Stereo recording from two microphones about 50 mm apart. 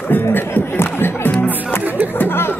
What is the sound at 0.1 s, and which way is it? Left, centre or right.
Speech, left.